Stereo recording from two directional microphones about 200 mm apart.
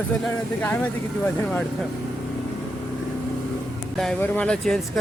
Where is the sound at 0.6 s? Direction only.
10° left (ahead or behind).